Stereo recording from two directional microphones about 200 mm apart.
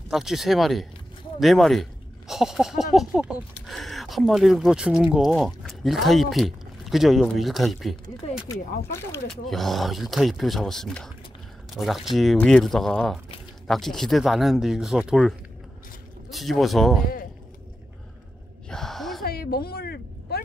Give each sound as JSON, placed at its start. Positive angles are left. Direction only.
{"t": 0.1, "sound": "speech", "side_deg": 0}
{"t": 8.5, "sound": "speech", "side_deg": 15}
{"t": 9.5, "sound": "speech", "side_deg": 0}
{"t": 18.7, "sound": "gasp", "side_deg": 0}
{"t": 19.2, "sound": "a sound", "side_deg": 50}